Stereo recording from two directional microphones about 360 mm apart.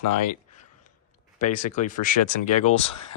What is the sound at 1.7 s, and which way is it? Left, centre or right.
Speech, left.